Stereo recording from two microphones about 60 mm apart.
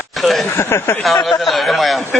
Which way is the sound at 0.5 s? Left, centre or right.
Left.